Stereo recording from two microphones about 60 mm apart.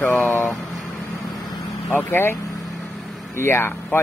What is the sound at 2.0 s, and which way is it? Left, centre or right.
Speech, left.